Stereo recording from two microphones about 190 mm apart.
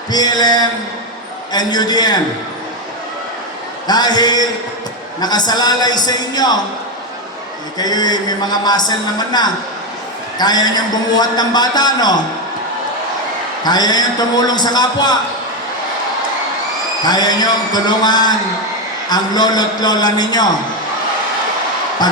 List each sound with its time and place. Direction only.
0.1 s a man's voice: 20° left (ahead or behind)
3.8 s a man's voice: 20° left (ahead or behind)
7.8 s a man's voice: 20° left (ahead or behind)
13.7 s a man's voice: 20° left (ahead or behind)
17.0 s a man's voice: 20° left (ahead or behind)